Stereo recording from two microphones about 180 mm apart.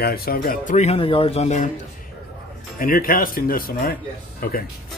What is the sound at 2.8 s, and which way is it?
Speech, 55° left (ahead or behind).